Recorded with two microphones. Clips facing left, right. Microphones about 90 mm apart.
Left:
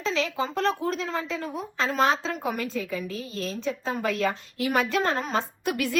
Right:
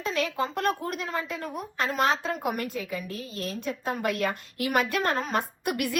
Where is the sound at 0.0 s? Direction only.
50° right (ahead or behind).